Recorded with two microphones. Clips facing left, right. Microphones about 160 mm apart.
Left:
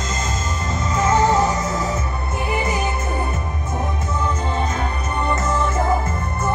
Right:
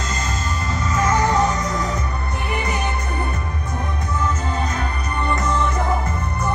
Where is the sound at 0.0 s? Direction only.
25° left (ahead or behind).